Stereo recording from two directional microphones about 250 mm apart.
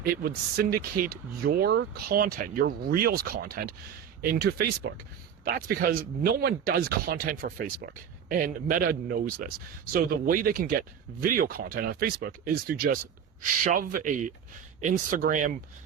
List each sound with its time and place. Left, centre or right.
0.0 s speech: right